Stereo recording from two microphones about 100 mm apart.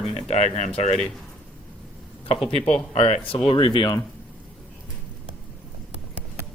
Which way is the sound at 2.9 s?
70° left (ahead or behind).